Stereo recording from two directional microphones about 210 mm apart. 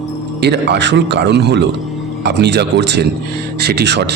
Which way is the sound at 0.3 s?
50° right (ahead or behind).